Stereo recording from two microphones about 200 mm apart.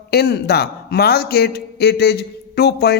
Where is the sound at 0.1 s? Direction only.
55° left (ahead or behind).